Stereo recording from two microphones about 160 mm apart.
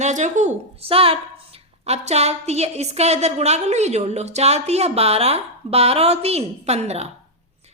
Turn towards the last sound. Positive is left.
turn(degrees=-45)  # may be behind; listen again after turning